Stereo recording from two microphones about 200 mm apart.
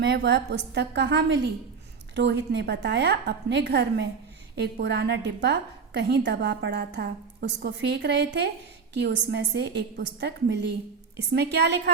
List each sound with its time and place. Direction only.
0.0 s a woman's voice: 55° right (ahead or behind)